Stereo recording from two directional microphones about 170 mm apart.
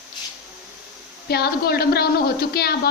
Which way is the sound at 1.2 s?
65° left (ahead or behind).